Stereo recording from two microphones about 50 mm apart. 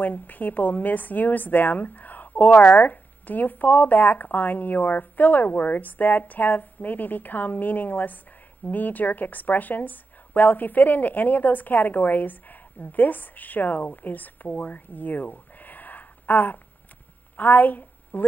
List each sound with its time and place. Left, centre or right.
0.0 s a woman's voice: left
14.7 s a sound: left
17.4 s a woman's voice: left